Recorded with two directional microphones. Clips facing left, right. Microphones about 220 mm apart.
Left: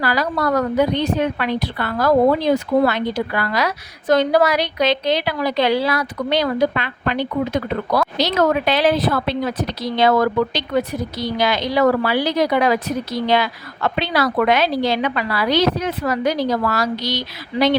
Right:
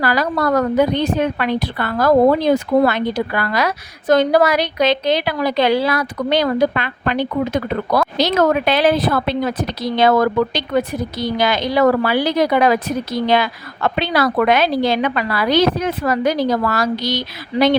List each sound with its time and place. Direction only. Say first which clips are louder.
0.0 s a woman's voice: right 2 dB; 50° right (ahead or behind)